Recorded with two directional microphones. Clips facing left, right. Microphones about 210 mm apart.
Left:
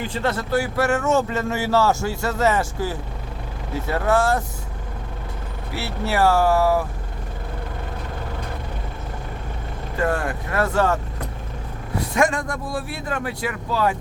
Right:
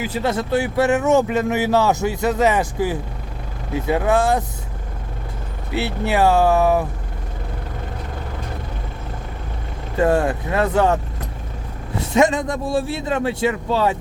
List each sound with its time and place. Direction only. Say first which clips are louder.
0.0 s speech: right 3 dB; 10° right (ahead or behind)
5.7 s a man's voice: right 4 dB; 20° right (ahead or behind)
10.0 s a man's voice: right 6 dB; 25° right (ahead or behind)
11.9 s a man's voice: right 4 dB; 20° right (ahead or behind)